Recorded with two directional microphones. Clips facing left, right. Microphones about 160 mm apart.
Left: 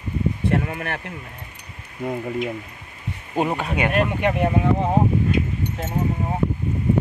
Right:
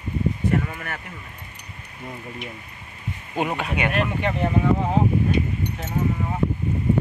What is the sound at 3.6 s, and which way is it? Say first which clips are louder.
Speech: left 3 dB; 40° left (ahead or behind).